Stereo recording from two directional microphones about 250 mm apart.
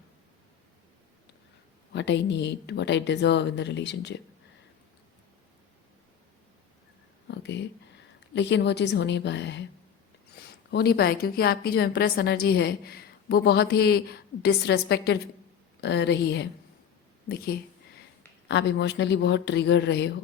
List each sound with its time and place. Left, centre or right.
1.9 s speech: left
7.3 s a sound: left
8.4 s a woman's voice: left